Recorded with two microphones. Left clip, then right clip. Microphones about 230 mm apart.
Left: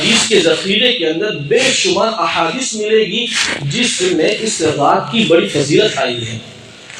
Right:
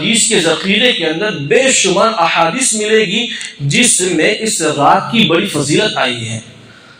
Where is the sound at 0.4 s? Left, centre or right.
Right.